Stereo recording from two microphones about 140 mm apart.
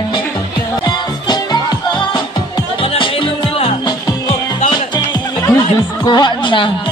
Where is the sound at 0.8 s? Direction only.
30° left (ahead or behind).